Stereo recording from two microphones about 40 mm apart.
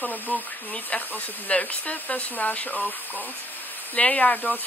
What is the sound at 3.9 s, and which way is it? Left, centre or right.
Speech, left.